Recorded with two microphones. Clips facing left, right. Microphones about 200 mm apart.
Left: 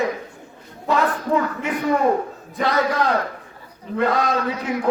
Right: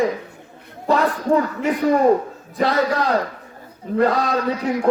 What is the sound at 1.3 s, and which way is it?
Speech, 45° right (ahead or behind).